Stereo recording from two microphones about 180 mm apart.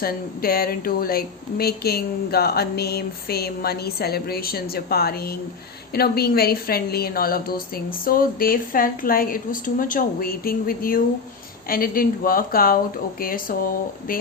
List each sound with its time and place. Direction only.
0.0 s a woman's voice: 55° left (ahead or behind)